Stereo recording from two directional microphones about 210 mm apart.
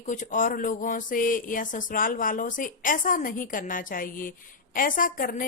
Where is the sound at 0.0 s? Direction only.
35° left (ahead or behind).